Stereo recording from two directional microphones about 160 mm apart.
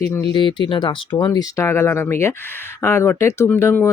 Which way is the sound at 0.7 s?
30° left (ahead or behind).